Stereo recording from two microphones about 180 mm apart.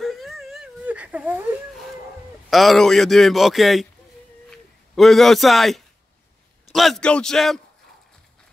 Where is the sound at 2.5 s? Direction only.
Centre (ahead or behind).